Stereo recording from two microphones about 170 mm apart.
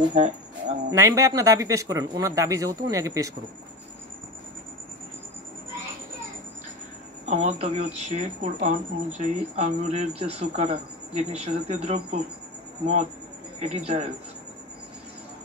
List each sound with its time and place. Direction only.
0.1 s a sound: 45° right (ahead or behind)
0.8 s speech: 15° right (ahead or behind)
7.2 s speech: 45° right (ahead or behind)
13.6 s speech: 40° right (ahead or behind)